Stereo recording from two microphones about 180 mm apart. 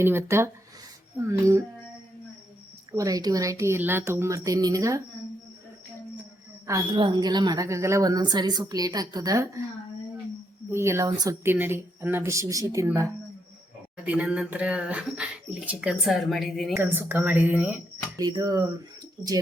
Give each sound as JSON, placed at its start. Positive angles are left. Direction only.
{"t": 0.0, "sound": "speech", "side_deg": -15}
{"t": 2.9, "sound": "speech", "side_deg": -20}
{"t": 6.7, "sound": "a woman's voice", "side_deg": -20}
{"t": 10.7, "sound": "speech", "side_deg": -15}
{"t": 16.7, "sound": "speech", "side_deg": -10}
{"t": 18.2, "sound": "a woman's voice", "side_deg": -20}